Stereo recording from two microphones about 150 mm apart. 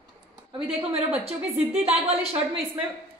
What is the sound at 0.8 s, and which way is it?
A woman's voice, 40° right (ahead or behind).